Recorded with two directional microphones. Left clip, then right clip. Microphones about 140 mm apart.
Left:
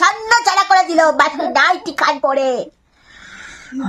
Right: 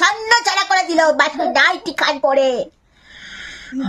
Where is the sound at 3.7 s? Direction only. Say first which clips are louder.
Even; 10° left (ahead or behind).